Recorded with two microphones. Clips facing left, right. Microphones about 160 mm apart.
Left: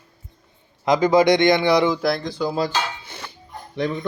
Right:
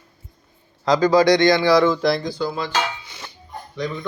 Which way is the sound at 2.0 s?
Centre (ahead or behind).